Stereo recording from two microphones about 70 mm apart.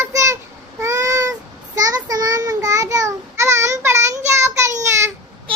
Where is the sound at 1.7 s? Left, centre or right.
Right.